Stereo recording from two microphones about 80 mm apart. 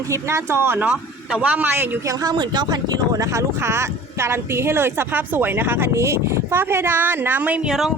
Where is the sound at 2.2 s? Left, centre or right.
Right.